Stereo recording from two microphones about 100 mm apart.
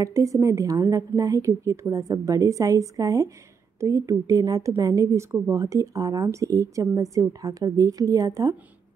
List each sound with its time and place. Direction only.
0.0 s a woman's voice: 35° right (ahead or behind)